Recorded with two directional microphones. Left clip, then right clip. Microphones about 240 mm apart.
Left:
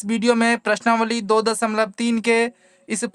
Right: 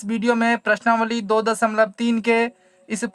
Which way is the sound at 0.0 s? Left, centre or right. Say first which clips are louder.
Left 2 dB; left.